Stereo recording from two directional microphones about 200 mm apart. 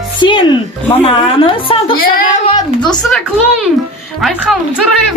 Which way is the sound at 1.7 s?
30° left (ahead or behind).